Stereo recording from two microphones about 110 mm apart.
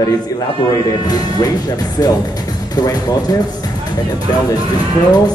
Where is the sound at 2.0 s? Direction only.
35° left (ahead or behind).